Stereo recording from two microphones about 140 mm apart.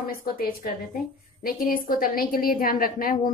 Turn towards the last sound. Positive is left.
turn(degrees=90)